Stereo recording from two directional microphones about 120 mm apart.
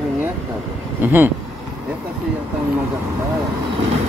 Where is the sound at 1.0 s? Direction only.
15° right (ahead or behind).